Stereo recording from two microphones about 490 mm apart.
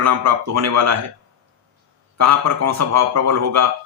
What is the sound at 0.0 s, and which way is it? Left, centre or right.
Speech, right.